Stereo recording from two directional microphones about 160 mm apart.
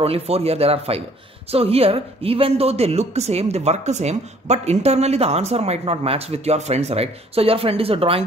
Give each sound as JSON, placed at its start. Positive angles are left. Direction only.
{"t": 0.0, "sound": "speech", "side_deg": -40}